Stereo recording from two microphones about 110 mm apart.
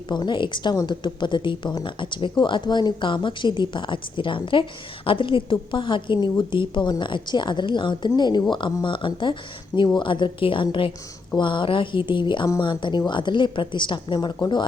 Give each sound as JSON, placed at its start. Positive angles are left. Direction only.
{"t": 0.1, "sound": "a woman's voice", "side_deg": 45}